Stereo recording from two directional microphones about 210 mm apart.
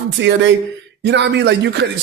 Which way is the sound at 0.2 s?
55° right (ahead or behind).